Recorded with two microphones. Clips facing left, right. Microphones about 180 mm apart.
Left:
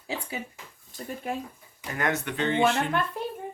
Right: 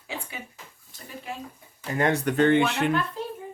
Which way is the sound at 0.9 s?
50° left (ahead or behind).